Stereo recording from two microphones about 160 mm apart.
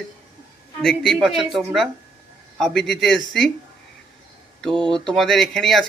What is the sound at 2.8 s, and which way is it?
Speech, centre (ahead or behind).